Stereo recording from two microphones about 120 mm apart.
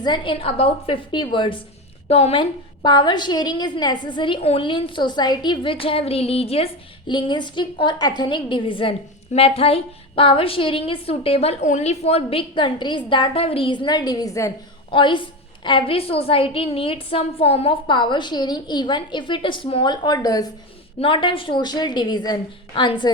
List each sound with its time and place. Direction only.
0.0 s a woman's voice: 40° left (ahead or behind)
2.0 s a woman's voice: 60° left (ahead or behind)
7.1 s a woman's voice: 40° left (ahead or behind)
14.8 s a woman's voice: 45° left (ahead or behind)
17.8 s a woman's voice: 40° left (ahead or behind)
21.0 s a woman's voice: 45° left (ahead or behind)